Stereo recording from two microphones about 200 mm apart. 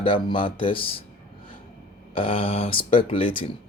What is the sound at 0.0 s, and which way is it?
Speech, 25° left (ahead or behind).